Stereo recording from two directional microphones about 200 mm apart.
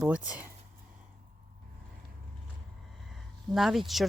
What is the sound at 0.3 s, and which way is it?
Speech, 5° right (ahead or behind).